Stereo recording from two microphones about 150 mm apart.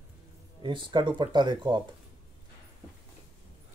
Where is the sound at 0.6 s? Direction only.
30° right (ahead or behind).